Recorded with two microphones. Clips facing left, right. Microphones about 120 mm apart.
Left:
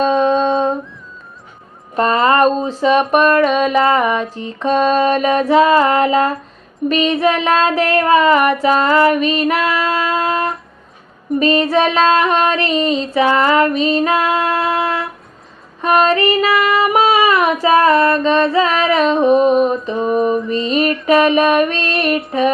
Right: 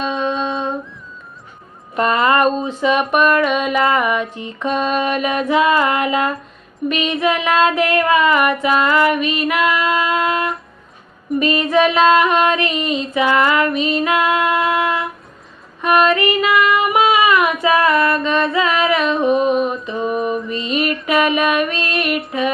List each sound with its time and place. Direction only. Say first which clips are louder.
0.0 s humming: left 7 dB; 35° left (ahead or behind)
2.0 s a sound: left 2 dB; 30° left (ahead or behind)
11.3 s female singing: left 3 dB; 35° left (ahead or behind)
19.5 s mantra: left 4 dB; centre (ahead or behind)
19.8 s mantra: left 3 dB; 35° left (ahead or behind)
20.5 s female singing: left 4 dB; 30° left (ahead or behind)
22.3 s a sound: left 6 dB; 35° left (ahead or behind)